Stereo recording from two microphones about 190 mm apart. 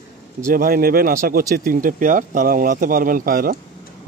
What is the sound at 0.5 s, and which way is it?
A man's voice, 50° right (ahead or behind).